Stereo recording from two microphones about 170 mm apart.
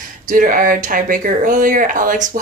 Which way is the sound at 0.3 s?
55° right (ahead or behind).